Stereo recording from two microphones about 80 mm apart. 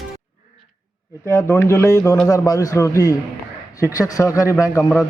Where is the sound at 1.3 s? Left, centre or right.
Left.